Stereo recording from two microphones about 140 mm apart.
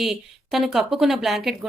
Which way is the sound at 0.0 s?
Centre (ahead or behind).